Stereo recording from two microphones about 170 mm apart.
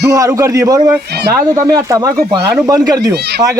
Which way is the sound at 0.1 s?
20° right (ahead or behind).